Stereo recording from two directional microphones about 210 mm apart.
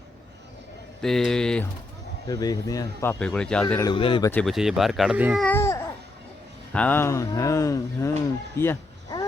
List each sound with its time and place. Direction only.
1.0 s speech: centre (ahead or behind)
2.2 s speech: 20° left (ahead or behind)
3.9 s speech: 25° left (ahead or behind)
4.3 s speech: 5° left (ahead or behind)
5.5 s babbling: 10° left (ahead or behind)
6.7 s speech: 10° left (ahead or behind)
8.5 s a sound: 10° left (ahead or behind)